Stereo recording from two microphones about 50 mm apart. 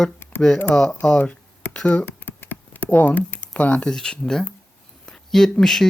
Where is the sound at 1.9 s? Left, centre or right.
Left.